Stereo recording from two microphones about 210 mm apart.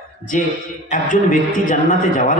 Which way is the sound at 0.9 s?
40° left (ahead or behind).